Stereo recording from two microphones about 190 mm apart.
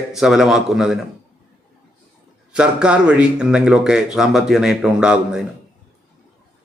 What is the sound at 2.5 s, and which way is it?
Speech, 5° right (ahead or behind).